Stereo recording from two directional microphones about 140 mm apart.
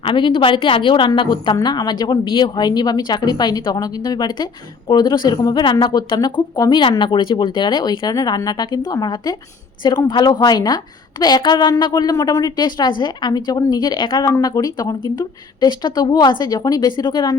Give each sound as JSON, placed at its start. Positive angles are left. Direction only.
{"t": 0.0, "sound": "a woman's voice", "side_deg": 35}